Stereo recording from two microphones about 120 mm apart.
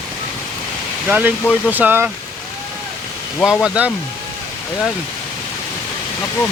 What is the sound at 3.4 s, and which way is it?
Speech, 5° right (ahead or behind).